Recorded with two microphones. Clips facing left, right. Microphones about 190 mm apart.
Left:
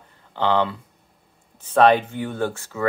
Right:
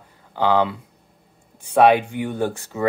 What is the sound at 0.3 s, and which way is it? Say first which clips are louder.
Speech: right 2 dB; 10° right (ahead or behind).